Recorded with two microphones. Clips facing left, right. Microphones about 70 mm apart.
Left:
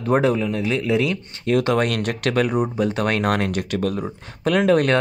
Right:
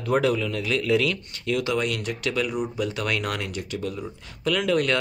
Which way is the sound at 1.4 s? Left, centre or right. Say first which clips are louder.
Left 6 dB; left.